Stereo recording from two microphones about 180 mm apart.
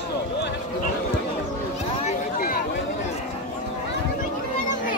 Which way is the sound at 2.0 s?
50° left (ahead or behind).